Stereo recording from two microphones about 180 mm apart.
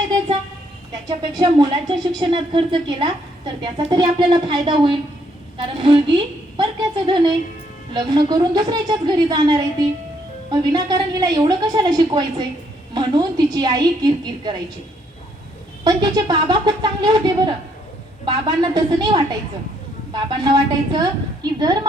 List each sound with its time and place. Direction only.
1.0 s speech: 20° right (ahead or behind)
15.8 s speech: 20° right (ahead or behind)